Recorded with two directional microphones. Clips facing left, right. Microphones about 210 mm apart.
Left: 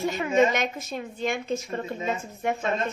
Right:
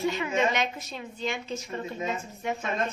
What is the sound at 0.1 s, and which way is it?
A woman's voice, 45° left (ahead or behind).